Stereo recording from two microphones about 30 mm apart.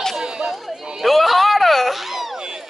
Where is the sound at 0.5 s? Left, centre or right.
Centre.